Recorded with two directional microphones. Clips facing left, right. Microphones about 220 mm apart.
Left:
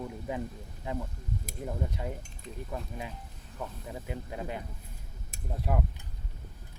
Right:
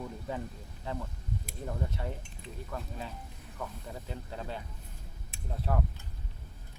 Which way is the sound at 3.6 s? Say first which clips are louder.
Left 2 dB; 15° left (ahead or behind).